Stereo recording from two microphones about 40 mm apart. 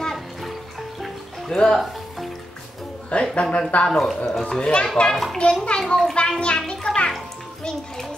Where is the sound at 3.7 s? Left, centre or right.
Left.